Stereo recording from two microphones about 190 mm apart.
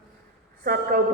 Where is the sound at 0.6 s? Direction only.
50° right (ahead or behind).